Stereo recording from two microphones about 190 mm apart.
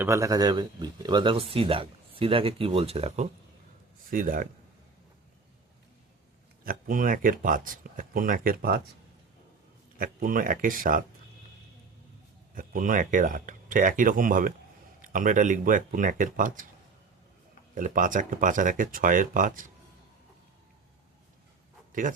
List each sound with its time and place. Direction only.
0.0 s speech: 15° right (ahead or behind); by 3.2 s 35° right (ahead or behind)
4.1 s speech: 45° right (ahead or behind)
6.7 s speech: 45° right (ahead or behind)
10.0 s speech: 50° right (ahead or behind)
12.5 s speech: 45° right (ahead or behind)
17.7 s speech: 45° right (ahead or behind)